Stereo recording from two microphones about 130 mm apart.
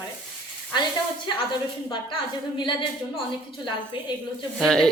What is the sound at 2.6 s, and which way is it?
Speech, 40° left (ahead or behind).